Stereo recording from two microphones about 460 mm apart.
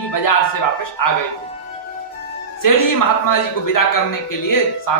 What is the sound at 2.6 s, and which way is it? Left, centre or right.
A man's voice, left.